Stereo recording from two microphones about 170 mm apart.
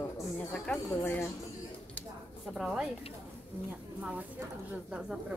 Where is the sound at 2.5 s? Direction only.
Centre (ahead or behind).